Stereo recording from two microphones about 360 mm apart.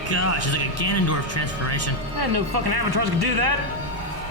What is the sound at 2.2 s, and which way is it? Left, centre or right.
A man's voice, right.